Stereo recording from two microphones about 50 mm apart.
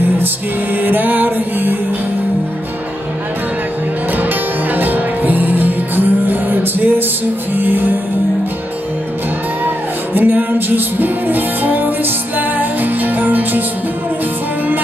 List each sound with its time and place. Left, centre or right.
0.8 s music: right
4.2 s music: right
10.1 s music: right